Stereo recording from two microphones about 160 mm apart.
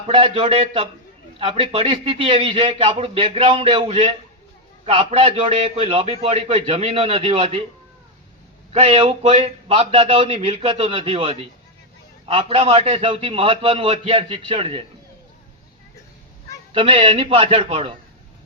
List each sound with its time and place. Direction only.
0.1 s a man's voice: 35° right (ahead or behind)
8.7 s a man's voice: 40° right (ahead or behind)
16.7 s a man's voice: 35° right (ahead or behind)